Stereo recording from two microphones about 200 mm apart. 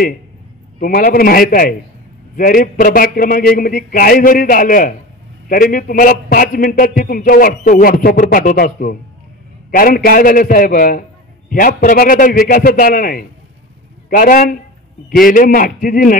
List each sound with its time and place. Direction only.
0.7 s a man's voice: 45° left (ahead or behind)